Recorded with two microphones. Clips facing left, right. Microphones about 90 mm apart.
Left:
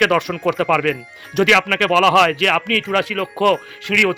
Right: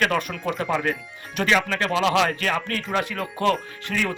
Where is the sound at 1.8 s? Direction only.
65° left (ahead or behind).